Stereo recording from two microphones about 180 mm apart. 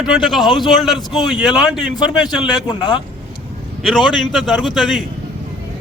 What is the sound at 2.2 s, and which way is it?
Speech, 25° left (ahead or behind).